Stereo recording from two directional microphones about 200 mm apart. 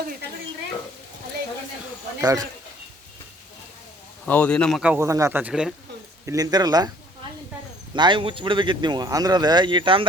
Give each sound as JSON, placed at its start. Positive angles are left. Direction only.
{"t": 2.2, "sound": "speech", "side_deg": -20}
{"t": 4.3, "sound": "a man's voice", "side_deg": 5}
{"t": 6.2, "sound": "speech", "side_deg": -20}
{"t": 7.9, "sound": "speech", "side_deg": -25}